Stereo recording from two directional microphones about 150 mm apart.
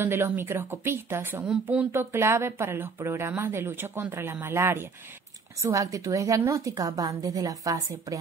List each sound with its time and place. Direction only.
0.0 s a woman's voice: 15° right (ahead or behind)